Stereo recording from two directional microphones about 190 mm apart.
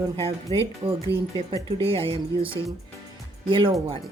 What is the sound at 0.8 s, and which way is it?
Speech, 30° right (ahead or behind).